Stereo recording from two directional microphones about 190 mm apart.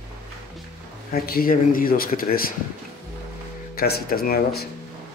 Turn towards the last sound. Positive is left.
turn(degrees=55)  # may be behind; listen again after turning